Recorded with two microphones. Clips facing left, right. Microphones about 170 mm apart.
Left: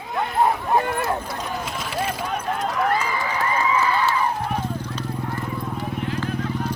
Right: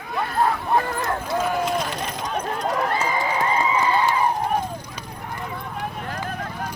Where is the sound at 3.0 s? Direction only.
25° right (ahead or behind).